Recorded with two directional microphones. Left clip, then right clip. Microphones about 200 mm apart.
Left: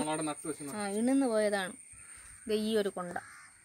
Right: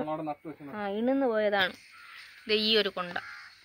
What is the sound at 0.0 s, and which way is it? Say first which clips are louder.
Speech: right 1 dB; 5° left (ahead or behind).